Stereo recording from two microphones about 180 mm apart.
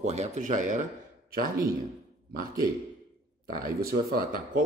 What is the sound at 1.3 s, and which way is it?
Speech, 55° right (ahead or behind).